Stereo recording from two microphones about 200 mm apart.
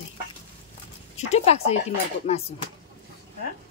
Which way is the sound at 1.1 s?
35° left (ahead or behind).